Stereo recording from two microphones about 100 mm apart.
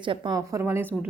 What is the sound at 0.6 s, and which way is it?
Speech, 20° right (ahead or behind).